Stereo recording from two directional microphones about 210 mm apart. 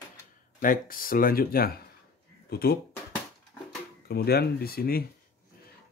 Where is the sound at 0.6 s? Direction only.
40° left (ahead or behind).